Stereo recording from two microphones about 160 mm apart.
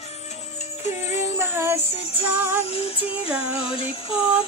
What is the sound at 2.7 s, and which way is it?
Music, 35° left (ahead or behind).